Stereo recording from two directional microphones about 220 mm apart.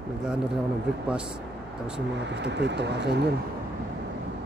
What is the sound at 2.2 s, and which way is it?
Speech, 50° right (ahead or behind).